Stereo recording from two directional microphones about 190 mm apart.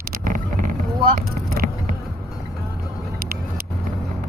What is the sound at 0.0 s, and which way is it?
Vehicle, 50° right (ahead or behind).